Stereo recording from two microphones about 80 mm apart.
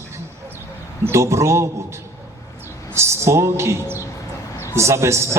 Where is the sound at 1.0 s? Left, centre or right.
Right.